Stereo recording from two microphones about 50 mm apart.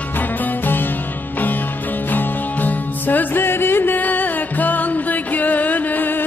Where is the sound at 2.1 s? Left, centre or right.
Left.